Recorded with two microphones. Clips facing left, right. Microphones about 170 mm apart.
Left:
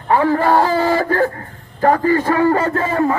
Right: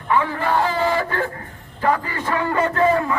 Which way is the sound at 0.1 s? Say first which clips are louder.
Left 6 dB; 40° left (ahead or behind).